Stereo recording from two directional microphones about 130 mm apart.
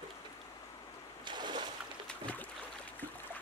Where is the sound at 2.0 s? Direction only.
10° left (ahead or behind).